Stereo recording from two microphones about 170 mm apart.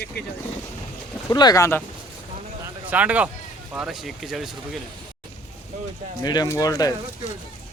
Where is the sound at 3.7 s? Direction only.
5° right (ahead or behind).